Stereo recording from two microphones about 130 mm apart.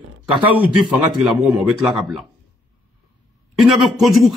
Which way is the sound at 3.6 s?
Centre (ahead or behind).